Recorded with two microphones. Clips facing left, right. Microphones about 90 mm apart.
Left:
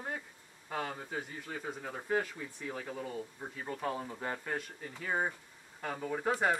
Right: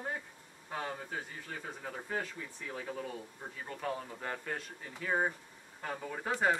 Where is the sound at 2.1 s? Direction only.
15° left (ahead or behind).